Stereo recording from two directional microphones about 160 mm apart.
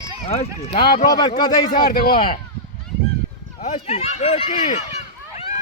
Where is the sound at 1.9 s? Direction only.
70° left (ahead or behind).